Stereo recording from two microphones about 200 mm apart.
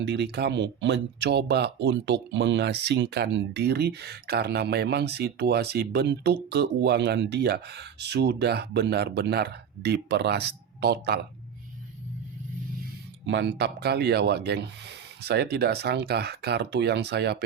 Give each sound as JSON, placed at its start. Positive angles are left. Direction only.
{"t": 0.0, "sound": "speech", "side_deg": -60}
{"t": 13.2, "sound": "speech", "side_deg": -65}